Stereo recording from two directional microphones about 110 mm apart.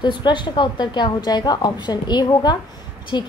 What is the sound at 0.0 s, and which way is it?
A woman's voice, 45° left (ahead or behind).